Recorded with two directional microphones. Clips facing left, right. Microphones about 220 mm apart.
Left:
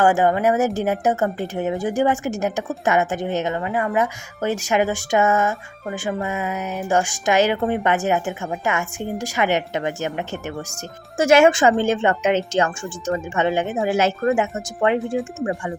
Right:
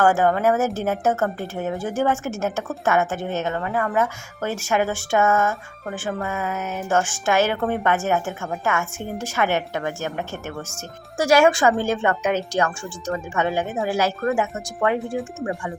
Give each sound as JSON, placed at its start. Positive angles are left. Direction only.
{"t": 0.0, "sound": "speech", "side_deg": 15}